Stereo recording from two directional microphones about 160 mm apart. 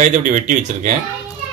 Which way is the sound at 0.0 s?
55° right (ahead or behind).